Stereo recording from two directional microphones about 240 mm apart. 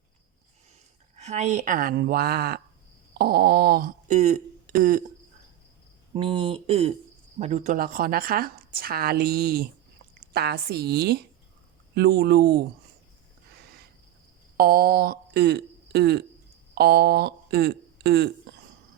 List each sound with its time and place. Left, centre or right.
1.1 s speech: right
6.1 s speech: right
14.5 s speech: right